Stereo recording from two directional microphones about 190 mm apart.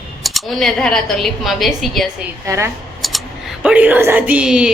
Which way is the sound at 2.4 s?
15° right (ahead or behind).